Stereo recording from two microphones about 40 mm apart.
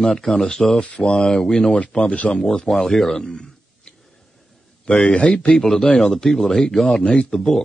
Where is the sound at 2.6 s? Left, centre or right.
Centre.